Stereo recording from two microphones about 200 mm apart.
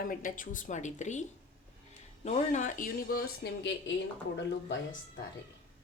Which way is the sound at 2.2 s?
35° left (ahead or behind).